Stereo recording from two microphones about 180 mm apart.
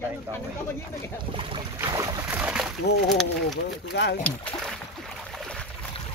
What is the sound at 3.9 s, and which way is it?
Speech, 70° left (ahead or behind).